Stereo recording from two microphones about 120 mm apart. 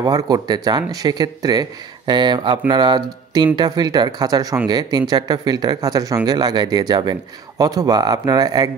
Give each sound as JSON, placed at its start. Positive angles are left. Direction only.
{"t": 0.0, "sound": "speech", "side_deg": -35}